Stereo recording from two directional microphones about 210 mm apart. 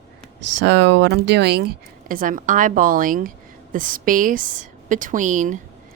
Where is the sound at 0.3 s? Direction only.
60° right (ahead or behind).